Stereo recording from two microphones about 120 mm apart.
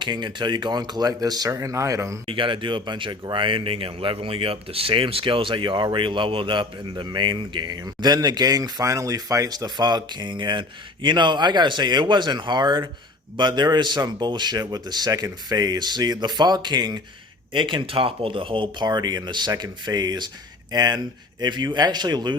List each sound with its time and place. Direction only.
0.0 s speech: 40° right (ahead or behind)
2.3 s speech: 45° right (ahead or behind)